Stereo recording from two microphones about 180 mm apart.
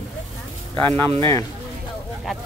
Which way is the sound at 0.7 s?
10° left (ahead or behind).